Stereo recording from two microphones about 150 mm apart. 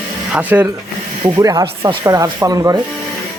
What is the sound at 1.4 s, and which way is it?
Speech, 25° right (ahead or behind).